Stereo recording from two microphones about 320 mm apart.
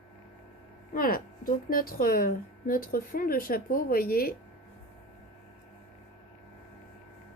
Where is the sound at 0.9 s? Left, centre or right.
Left.